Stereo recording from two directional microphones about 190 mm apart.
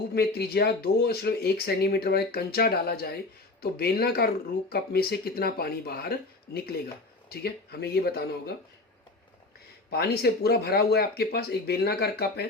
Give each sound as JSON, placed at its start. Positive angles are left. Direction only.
{"t": 0.1, "sound": "speech", "side_deg": 55}
{"t": 9.9, "sound": "speech", "side_deg": 55}